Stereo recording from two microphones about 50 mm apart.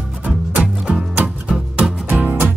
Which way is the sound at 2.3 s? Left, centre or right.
Right.